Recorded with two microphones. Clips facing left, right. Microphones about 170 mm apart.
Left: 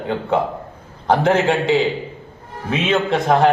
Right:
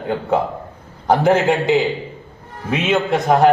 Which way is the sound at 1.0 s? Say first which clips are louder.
Right 1 dB; 10° right (ahead or behind).